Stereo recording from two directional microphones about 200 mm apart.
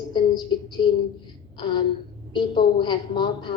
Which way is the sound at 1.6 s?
20° left (ahead or behind).